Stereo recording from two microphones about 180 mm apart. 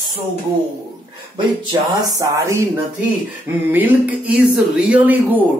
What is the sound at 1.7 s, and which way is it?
Speech, 20° right (ahead or behind).